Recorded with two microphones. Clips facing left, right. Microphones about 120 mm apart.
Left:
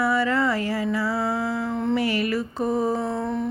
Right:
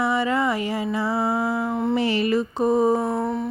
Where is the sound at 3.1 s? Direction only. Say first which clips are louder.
Right 2 dB; 5° right (ahead or behind).